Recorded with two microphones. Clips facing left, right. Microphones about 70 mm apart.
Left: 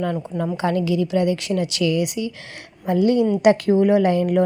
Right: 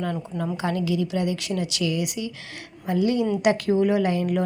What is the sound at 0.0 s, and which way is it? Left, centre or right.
A woman's voice, left.